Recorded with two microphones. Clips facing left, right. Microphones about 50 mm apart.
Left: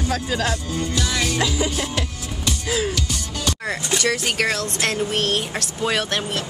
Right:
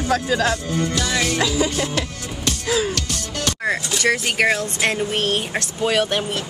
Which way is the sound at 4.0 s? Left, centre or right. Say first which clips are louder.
Right 4 dB; centre.